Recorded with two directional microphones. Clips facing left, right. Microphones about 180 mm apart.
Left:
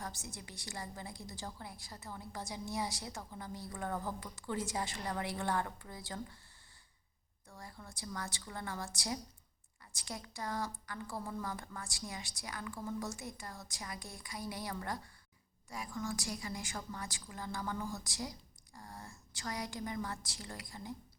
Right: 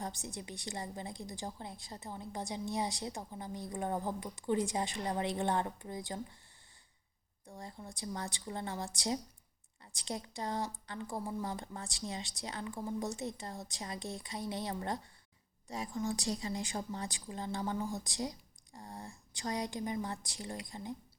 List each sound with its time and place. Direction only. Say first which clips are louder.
0.0 s a woman's voice: right 4 dB; 20° right (ahead or behind)
7.4 s a woman's voice: right 4 dB; 20° right (ahead or behind)